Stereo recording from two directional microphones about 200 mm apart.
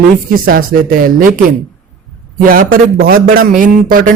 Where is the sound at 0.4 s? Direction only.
45° right (ahead or behind).